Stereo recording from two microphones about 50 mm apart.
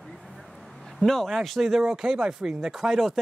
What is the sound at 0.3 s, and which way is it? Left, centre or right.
Vehicle, centre.